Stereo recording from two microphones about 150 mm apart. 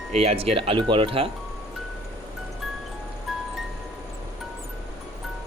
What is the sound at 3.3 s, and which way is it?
Music, centre (ahead or behind).